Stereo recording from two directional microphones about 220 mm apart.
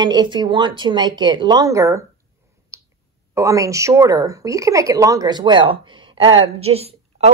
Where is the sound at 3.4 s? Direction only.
15° right (ahead or behind).